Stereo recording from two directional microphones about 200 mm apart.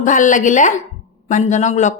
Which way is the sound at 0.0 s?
40° left (ahead or behind).